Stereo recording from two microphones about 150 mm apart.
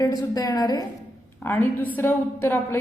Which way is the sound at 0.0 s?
25° left (ahead or behind).